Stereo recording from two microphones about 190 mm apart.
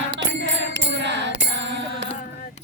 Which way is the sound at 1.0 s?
65° right (ahead or behind).